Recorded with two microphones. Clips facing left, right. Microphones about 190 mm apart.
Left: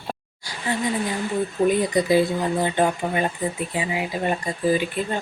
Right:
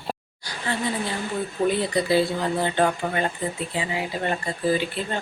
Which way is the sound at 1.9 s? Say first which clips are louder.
Left 2 dB; 20° left (ahead or behind).